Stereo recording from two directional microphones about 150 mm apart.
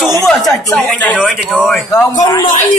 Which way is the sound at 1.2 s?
Centre (ahead or behind).